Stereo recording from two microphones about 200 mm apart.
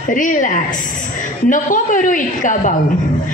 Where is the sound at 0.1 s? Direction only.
40° left (ahead or behind).